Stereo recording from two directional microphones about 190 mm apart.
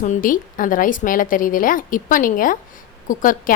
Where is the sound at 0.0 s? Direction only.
45° left (ahead or behind).